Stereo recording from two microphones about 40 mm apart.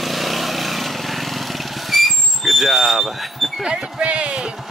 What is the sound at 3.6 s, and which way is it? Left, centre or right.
Speech, centre.